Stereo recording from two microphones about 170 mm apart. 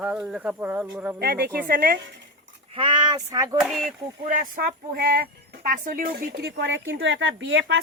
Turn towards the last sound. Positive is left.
turn(degrees=-90)